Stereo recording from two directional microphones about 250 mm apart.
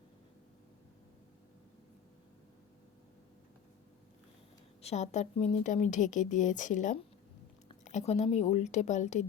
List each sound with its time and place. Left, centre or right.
4.8 s a woman's voice: left